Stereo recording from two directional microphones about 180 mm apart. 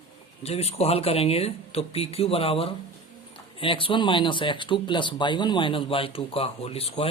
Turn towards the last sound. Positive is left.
turn(degrees=35)  # may be behind; listen again after turning